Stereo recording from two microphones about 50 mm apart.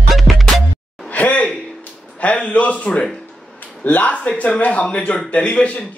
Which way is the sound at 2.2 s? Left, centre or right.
Left.